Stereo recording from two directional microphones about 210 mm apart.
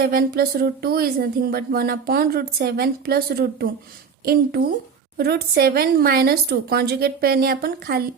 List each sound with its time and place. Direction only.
0.0 s speech: 45° right (ahead or behind)
5.1 s speech: 50° right (ahead or behind)